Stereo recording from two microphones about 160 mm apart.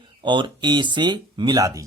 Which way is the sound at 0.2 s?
30° right (ahead or behind).